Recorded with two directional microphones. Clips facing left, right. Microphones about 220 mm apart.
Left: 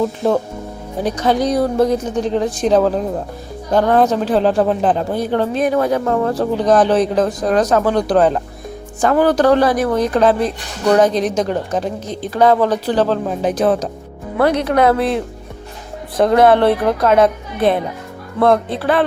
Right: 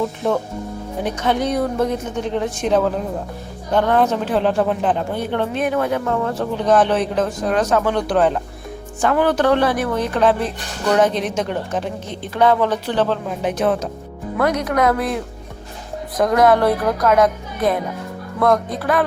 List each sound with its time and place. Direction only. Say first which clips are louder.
0.2 s a woman's voice: left 3 dB; 35° left (ahead or behind)